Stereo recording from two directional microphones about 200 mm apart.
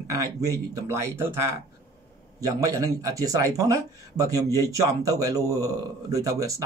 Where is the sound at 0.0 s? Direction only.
15° right (ahead or behind).